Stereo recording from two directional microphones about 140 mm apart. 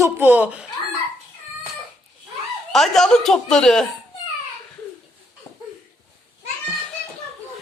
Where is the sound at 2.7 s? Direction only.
Centre (ahead or behind).